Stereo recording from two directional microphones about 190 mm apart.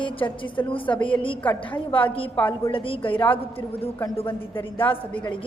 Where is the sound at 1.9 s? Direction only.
30° left (ahead or behind).